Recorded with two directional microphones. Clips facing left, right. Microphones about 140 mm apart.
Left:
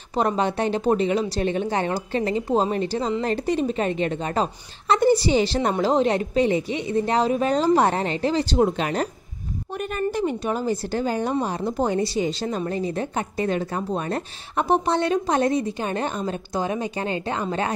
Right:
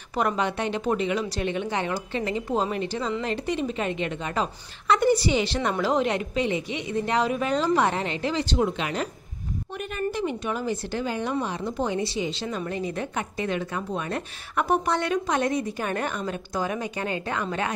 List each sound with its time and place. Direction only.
0.1 s a woman's voice: 30° left (ahead or behind)